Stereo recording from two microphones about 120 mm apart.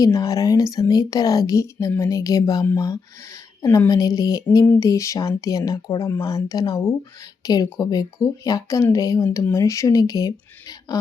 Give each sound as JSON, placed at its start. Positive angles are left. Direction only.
{"t": 0.0, "sound": "speech", "side_deg": 30}